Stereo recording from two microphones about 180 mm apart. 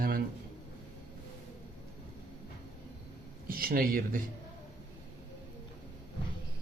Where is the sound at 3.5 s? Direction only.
55° right (ahead or behind).